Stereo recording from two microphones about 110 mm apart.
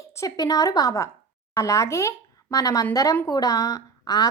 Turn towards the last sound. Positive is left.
turn(degrees=35)  # may be behind; listen again after turning